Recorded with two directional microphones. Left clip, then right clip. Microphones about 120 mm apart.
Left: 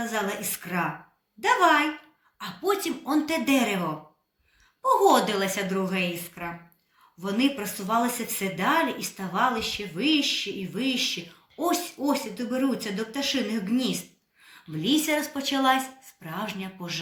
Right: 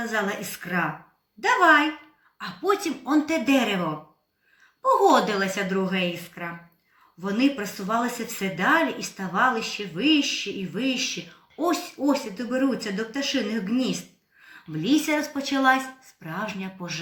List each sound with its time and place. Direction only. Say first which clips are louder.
0.0 s a woman's voice: right 2 dB; 20° left (ahead or behind)